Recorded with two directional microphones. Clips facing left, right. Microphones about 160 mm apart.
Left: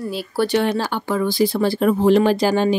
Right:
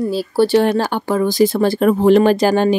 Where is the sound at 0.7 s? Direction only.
50° right (ahead or behind).